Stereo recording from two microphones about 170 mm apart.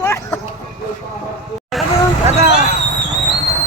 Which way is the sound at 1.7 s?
Centre (ahead or behind).